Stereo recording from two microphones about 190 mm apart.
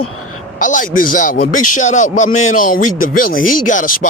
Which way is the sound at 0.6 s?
45° left (ahead or behind).